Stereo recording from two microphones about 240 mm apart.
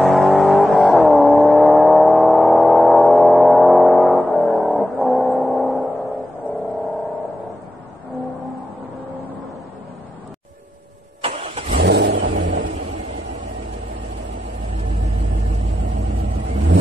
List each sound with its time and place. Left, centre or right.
0.0 s vehicle: centre
11.2 s vehicle: right
11.8 s vehicle: right